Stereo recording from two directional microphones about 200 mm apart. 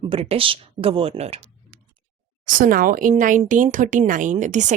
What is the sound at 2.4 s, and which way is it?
Speech, 45° right (ahead or behind).